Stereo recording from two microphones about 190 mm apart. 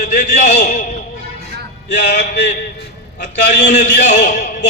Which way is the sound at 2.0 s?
60° left (ahead or behind).